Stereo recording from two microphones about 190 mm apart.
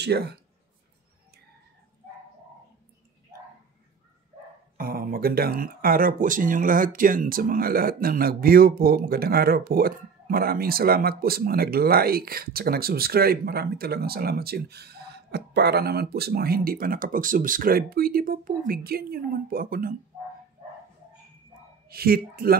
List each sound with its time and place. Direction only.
0.0 s speech: 60° right (ahead or behind)
4.7 s speech: 50° right (ahead or behind)
21.8 s speech: 50° right (ahead or behind)